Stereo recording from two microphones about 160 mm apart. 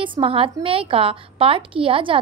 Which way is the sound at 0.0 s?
35° right (ahead or behind).